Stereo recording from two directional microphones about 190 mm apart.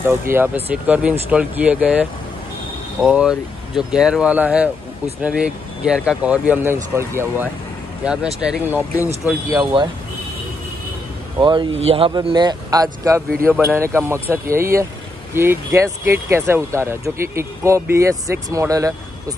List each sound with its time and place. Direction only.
0.0 s speech: 10° right (ahead or behind)
9.6 s speech: 25° right (ahead or behind)
11.3 s speech: 25° right (ahead or behind)